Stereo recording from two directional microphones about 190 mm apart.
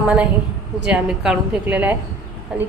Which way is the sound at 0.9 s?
5° right (ahead or behind).